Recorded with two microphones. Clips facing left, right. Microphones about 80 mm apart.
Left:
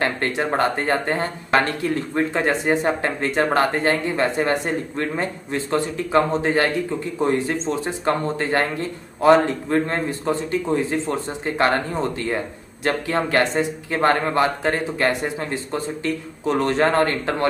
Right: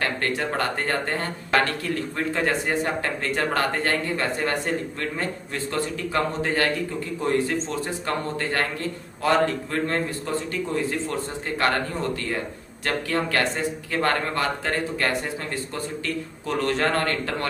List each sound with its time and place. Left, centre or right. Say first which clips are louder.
0.0 s speech: left 3 dB; left